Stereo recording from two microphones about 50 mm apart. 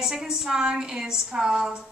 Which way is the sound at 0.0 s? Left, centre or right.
Centre.